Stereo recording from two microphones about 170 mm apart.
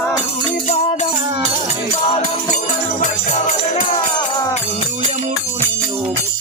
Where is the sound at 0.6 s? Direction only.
45° left (ahead or behind).